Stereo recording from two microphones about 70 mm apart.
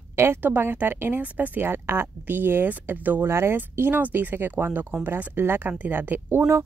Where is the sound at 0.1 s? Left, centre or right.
Right.